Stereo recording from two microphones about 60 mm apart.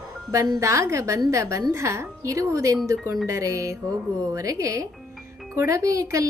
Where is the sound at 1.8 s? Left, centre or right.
Right.